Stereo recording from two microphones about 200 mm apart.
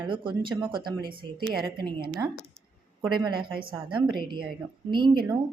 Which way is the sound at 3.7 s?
25° right (ahead or behind).